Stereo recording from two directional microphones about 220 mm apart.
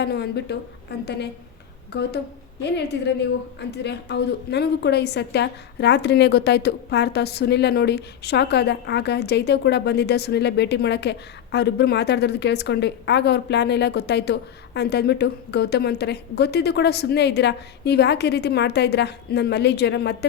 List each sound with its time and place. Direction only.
0.0 s a woman's voice: 50° left (ahead or behind)